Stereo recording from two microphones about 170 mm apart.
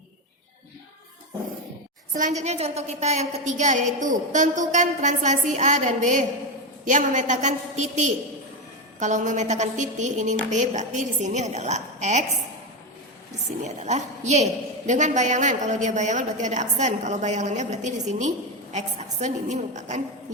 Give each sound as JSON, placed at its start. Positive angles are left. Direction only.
{"t": 2.1, "sound": "a woman's voice", "side_deg": -45}
{"t": 13.7, "sound": "a woman's voice", "side_deg": -40}